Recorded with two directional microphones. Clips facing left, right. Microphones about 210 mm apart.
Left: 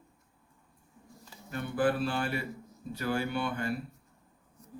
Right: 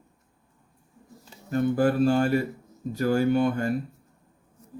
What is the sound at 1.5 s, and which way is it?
Music, 40° right (ahead or behind).